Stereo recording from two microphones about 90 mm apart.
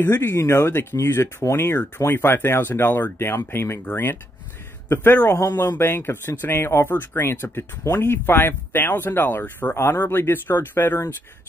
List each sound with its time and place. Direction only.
0.0 s speech: 25° left (ahead or behind)